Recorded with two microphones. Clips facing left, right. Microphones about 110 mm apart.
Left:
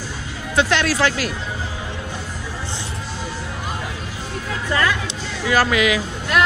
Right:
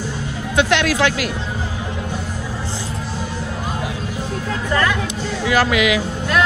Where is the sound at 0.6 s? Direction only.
35° left (ahead or behind).